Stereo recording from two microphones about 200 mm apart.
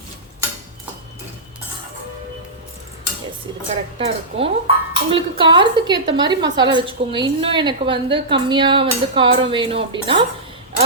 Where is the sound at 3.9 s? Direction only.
30° right (ahead or behind).